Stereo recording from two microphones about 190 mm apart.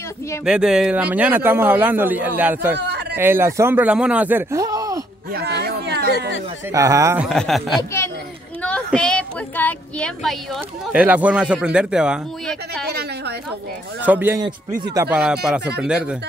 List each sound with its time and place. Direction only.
0.5 s speech: 5° right (ahead or behind)
2.8 s a sound: 60° right (ahead or behind)
3.2 s speech: 10° right (ahead or behind)
5.3 s a sound: 60° right (ahead or behind)
6.7 s speech: 15° right (ahead or behind)
7.2 s speech: centre (ahead or behind)
14.0 s speech: 10° right (ahead or behind)